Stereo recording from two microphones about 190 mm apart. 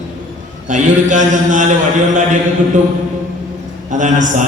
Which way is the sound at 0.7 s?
40° right (ahead or behind).